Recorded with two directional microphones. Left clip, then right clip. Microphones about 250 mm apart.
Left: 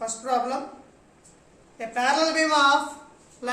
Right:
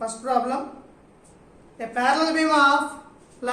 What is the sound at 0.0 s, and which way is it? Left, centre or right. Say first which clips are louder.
Speech: right 2 dB; centre.